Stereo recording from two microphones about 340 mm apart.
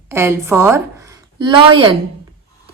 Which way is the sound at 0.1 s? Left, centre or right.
Centre.